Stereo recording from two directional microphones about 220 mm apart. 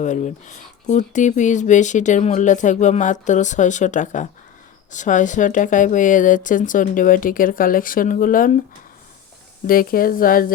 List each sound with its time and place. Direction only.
0.0 s speech: 35° left (ahead or behind)
9.6 s speech: 40° left (ahead or behind)